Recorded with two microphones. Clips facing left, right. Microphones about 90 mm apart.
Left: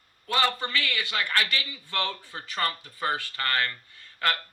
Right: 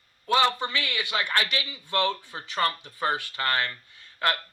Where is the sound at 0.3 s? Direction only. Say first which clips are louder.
Right 3 dB; 20° right (ahead or behind).